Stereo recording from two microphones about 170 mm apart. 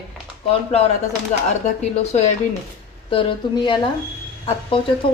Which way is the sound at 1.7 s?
40° left (ahead or behind).